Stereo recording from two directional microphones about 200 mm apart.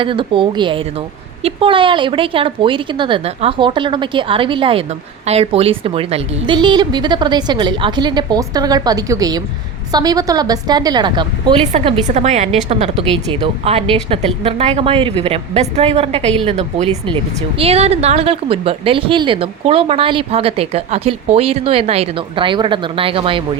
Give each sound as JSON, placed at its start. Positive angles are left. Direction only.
{"t": 0.0, "sound": "speech", "side_deg": -25}
{"t": 11.7, "sound": "a woman's voice", "side_deg": -35}